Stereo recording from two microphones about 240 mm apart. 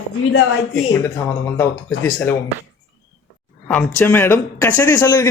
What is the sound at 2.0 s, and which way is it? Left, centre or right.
Speech, centre.